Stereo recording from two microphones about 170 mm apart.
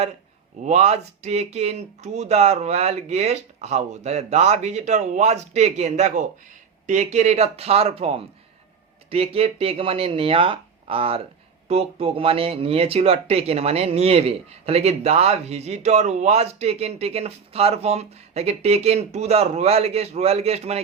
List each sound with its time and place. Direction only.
0.6 s speech: 40° right (ahead or behind)